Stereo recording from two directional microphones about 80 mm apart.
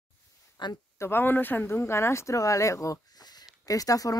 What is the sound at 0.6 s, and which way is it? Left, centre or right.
Speech, left.